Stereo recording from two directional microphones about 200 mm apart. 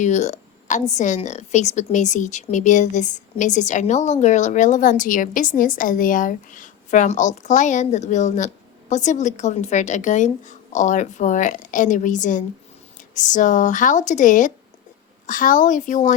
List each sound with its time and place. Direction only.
0.0 s a woman's voice: 35° left (ahead or behind)